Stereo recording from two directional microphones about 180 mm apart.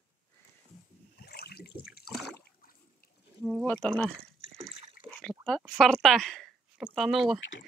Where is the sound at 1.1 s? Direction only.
60° left (ahead or behind).